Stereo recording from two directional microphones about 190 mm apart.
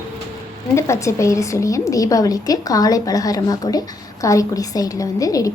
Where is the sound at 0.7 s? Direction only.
15° left (ahead or behind).